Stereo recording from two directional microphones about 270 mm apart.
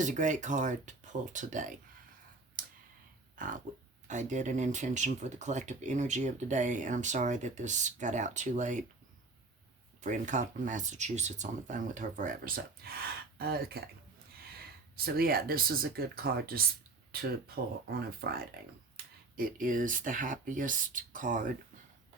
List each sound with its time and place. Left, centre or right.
0.0 s speech: right
2.6 s clicking: right
3.4 s speech: right
10.0 s speech: right